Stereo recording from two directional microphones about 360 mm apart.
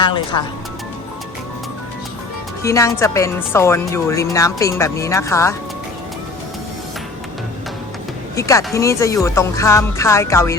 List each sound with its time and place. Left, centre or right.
0.0 s a woman's voice: centre
2.6 s a woman's voice: centre
8.4 s a woman's voice: centre